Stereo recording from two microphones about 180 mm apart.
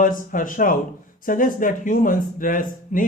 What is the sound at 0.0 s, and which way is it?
A man's voice, 50° left (ahead or behind).